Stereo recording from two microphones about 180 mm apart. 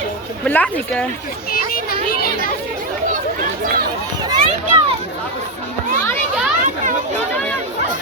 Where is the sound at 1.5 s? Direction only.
55° left (ahead or behind).